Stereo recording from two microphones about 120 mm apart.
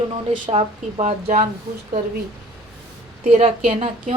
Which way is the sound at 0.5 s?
65° right (ahead or behind).